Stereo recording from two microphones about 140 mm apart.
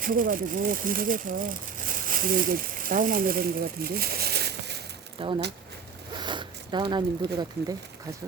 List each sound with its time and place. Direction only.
0.0 s speech: 75° right (ahead or behind)
5.2 s speech: 40° right (ahead or behind)